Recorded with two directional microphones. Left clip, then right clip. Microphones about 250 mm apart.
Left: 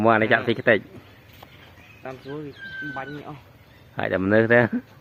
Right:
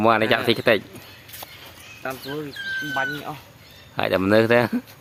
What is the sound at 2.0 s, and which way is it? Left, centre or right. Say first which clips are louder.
Speech: right 5 dB; right.